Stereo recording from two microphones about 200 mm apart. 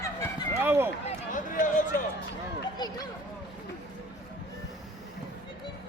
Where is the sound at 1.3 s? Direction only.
40° left (ahead or behind).